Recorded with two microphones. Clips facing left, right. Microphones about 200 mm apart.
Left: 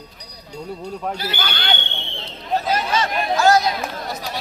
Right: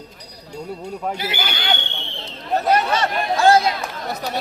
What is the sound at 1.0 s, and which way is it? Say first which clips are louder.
Speech: right 1 dB; 10° right (ahead or behind).